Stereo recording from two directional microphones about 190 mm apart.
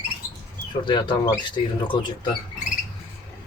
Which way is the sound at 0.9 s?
25° left (ahead or behind).